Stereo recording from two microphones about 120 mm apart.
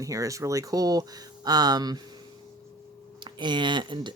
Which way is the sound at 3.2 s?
40° right (ahead or behind).